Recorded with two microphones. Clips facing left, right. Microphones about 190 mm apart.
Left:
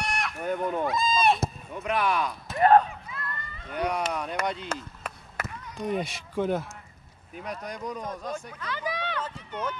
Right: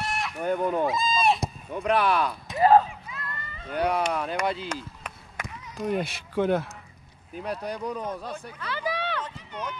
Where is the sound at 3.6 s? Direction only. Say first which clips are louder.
Right 3 dB; 30° right (ahead or behind).